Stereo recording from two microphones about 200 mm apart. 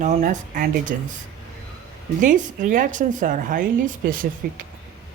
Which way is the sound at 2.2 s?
40° right (ahead or behind).